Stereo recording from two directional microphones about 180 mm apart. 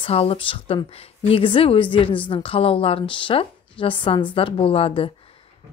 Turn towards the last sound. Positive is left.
turn(degrees=30)  # may be behind; listen again after turning